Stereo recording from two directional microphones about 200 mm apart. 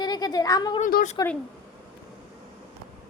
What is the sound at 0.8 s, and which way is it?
Speech, 40° left (ahead or behind).